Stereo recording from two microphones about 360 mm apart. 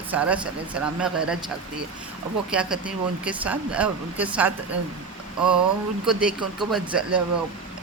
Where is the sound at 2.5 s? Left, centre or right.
Centre.